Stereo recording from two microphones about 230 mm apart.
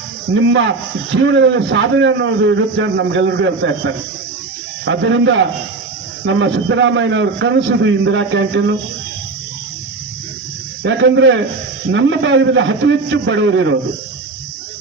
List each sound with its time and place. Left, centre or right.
0.3 s a man's voice: right
10.8 s a man's voice: right